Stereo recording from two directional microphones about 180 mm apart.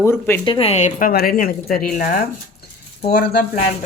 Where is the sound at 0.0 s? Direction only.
15° left (ahead or behind).